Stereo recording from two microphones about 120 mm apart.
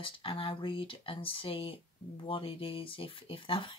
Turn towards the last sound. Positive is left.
turn(degrees=45)  # may be behind; listen again after turning